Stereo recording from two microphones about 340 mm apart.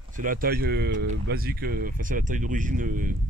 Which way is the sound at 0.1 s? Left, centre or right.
Right.